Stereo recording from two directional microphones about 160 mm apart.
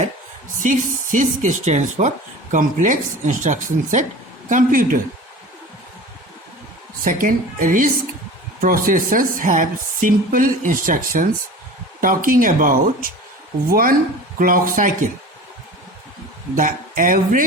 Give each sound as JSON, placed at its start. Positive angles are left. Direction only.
{"t": 0.6, "sound": "speech", "side_deg": -50}
{"t": 7.0, "sound": "speech", "side_deg": -60}
{"t": 16.6, "sound": "speech", "side_deg": -55}